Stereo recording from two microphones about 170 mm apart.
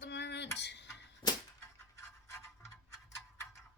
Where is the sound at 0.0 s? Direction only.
90° left.